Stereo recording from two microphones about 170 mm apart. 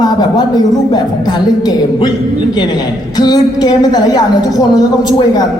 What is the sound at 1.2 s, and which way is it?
Speech, 25° left (ahead or behind).